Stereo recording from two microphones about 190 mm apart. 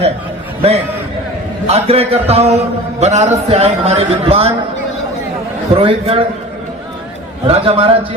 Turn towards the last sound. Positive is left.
turn(degrees=-30)  # may be behind; listen again after turning